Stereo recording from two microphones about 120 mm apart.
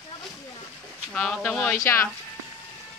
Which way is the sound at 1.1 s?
10° left (ahead or behind).